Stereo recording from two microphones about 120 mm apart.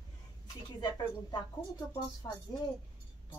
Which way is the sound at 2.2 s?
30° left (ahead or behind).